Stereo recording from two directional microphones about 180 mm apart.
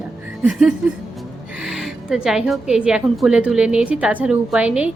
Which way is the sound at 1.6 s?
Centre (ahead or behind).